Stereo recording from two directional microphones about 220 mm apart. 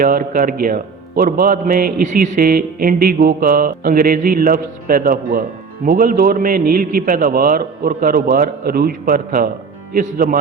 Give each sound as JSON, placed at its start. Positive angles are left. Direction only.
{"t": 0.0, "sound": "a man's voice", "side_deg": -40}